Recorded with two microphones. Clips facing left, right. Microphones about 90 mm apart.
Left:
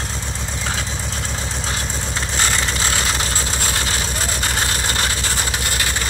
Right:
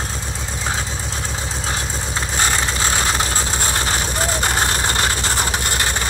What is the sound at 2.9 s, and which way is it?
Vehicle, 35° right (ahead or behind).